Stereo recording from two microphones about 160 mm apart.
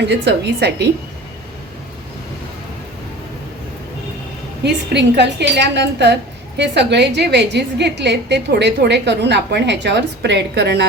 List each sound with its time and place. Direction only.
0.1 s a woman's voice: 90° right
4.6 s a woman's voice: 90° right